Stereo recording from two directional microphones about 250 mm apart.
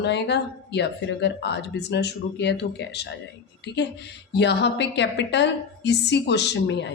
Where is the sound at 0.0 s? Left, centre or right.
Left.